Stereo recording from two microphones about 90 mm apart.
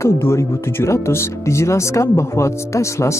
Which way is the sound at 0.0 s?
30° left (ahead or behind).